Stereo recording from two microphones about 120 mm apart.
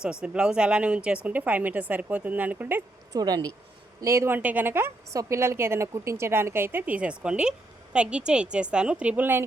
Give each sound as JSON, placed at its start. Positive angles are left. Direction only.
{"t": 0.0, "sound": "speech", "side_deg": -5}
{"t": 3.1, "sound": "a woman's voice", "side_deg": -30}